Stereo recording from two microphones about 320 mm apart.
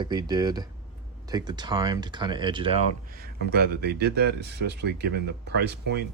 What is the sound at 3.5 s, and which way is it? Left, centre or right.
Speech, right.